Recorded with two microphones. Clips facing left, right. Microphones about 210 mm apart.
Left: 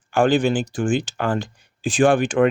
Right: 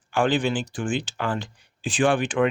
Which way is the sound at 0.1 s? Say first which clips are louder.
Left 5 dB; 45° left (ahead or behind).